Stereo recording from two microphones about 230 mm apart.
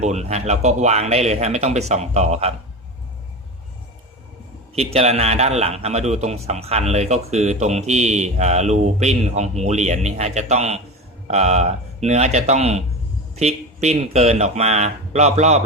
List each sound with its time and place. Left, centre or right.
0.0 s a man's voice: right
4.7 s a man's voice: right